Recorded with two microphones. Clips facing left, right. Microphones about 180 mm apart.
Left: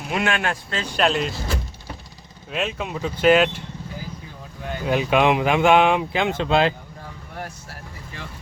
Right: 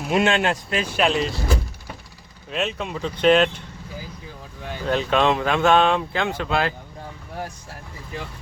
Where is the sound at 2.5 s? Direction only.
Centre (ahead or behind).